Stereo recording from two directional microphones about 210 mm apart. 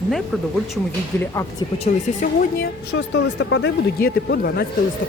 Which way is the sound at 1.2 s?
15° left (ahead or behind).